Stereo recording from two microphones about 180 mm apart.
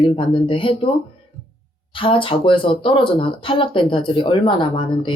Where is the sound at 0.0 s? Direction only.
30° left (ahead or behind).